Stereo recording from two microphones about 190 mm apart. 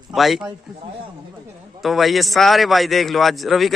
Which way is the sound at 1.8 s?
Centre (ahead or behind).